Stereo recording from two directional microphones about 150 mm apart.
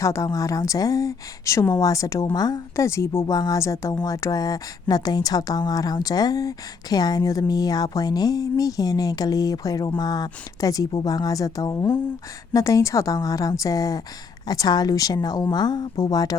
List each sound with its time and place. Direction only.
0.0 s speech: 20° left (ahead or behind)